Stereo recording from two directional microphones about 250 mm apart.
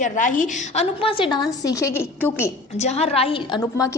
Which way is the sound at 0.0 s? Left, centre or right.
Left.